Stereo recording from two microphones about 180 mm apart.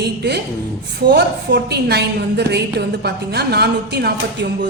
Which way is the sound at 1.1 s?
65° right (ahead or behind).